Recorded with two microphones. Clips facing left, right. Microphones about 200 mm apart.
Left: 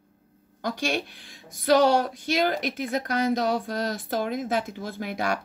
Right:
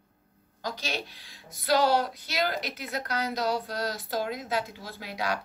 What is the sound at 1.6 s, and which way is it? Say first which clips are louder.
A woman's voice: left 4 dB; 50° left (ahead or behind).